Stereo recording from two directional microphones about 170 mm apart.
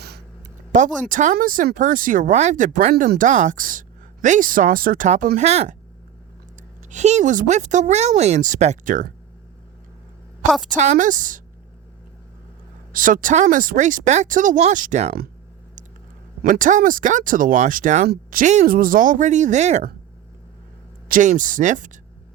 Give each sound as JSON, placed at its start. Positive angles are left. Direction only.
{"t": 0.7, "sound": "speech", "side_deg": -50}
{"t": 6.9, "sound": "speech", "side_deg": -45}
{"t": 10.5, "sound": "a woman's voice", "side_deg": 0}
{"t": 10.8, "sound": "speech", "side_deg": -45}
{"t": 12.9, "sound": "speech", "side_deg": -55}
{"t": 16.4, "sound": "speech", "side_deg": -50}
{"t": 21.1, "sound": "speech", "side_deg": -50}